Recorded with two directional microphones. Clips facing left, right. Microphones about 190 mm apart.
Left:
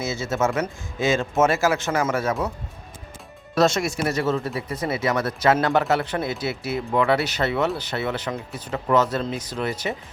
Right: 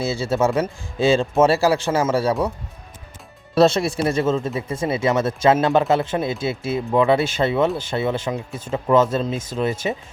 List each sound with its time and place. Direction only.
0.1 s speech: 30° right (ahead or behind)
3.8 s speech: 30° right (ahead or behind)